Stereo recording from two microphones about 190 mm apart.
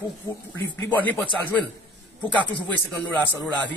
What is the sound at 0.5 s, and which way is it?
Speech, 75° left (ahead or behind).